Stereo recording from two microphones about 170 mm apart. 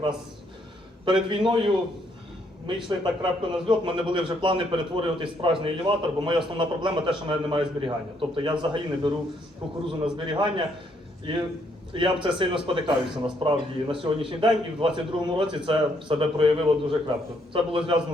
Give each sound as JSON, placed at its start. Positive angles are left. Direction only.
{"t": 1.3, "sound": "a man's voice", "side_deg": -30}